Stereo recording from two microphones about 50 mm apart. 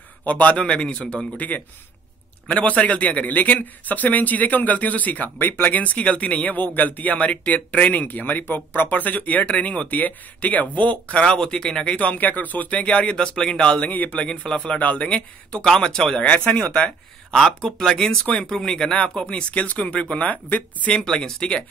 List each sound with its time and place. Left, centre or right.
0.2 s speech: left
2.5 s a man's voice: left
11.3 s speech: centre
12.0 s speech: left
13.8 s a man's voice: left; by 14.8 s centre
14.8 s speech: left
15.6 s speech: centre
16.2 s speech: left
17.4 s speech: centre; by 20.9 s left
20.9 s speech: centre